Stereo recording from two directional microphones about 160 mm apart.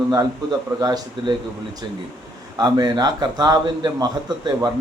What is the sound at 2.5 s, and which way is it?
A man's voice, 25° right (ahead or behind).